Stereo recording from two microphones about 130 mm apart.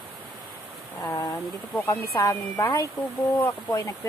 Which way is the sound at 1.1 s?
25° left (ahead or behind).